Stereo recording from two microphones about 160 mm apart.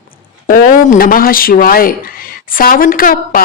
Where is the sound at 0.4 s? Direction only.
60° left (ahead or behind).